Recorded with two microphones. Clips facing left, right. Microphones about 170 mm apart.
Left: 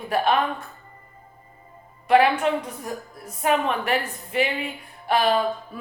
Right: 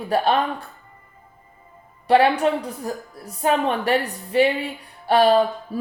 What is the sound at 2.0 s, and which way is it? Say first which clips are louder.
Speech: right 2 dB; 35° right (ahead or behind).